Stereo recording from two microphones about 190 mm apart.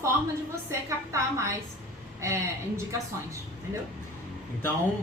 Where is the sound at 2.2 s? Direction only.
15° right (ahead or behind).